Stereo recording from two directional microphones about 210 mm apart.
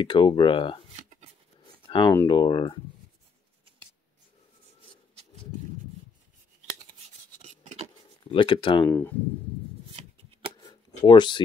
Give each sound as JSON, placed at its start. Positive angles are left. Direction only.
{"t": 0.0, "sound": "speech", "side_deg": 20}
{"t": 1.9, "sound": "speech", "side_deg": 25}
{"t": 7.4, "sound": "a sound", "side_deg": -30}
{"t": 8.3, "sound": "speech", "side_deg": 25}
{"t": 10.5, "sound": "shuffling cards", "side_deg": 20}